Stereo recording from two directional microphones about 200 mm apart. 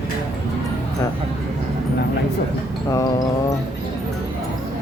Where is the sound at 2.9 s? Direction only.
15° left (ahead or behind).